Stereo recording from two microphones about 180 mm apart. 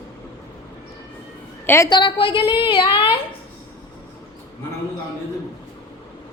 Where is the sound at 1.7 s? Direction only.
20° left (ahead or behind).